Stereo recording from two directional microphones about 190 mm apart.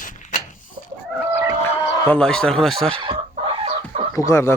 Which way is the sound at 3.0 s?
30° right (ahead or behind).